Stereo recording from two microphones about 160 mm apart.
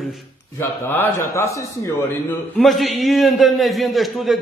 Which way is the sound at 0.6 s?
15° left (ahead or behind).